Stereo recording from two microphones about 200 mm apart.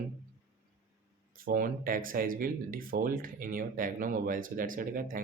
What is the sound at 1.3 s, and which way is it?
Speech, 45° right (ahead or behind).